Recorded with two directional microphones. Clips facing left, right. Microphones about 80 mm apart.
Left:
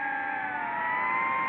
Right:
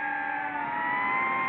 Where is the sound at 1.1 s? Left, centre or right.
Right.